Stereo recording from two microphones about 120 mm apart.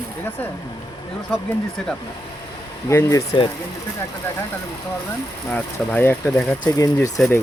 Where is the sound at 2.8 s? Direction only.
25° left (ahead or behind).